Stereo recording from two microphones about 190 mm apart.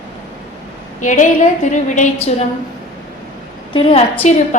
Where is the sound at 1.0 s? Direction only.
40° left (ahead or behind).